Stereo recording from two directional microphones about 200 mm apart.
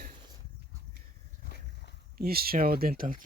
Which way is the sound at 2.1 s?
50° right (ahead or behind).